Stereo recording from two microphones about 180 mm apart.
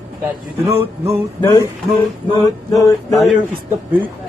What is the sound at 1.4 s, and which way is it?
Male singing, 20° left (ahead or behind).